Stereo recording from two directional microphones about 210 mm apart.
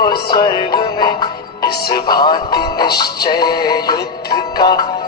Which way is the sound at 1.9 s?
20° left (ahead or behind).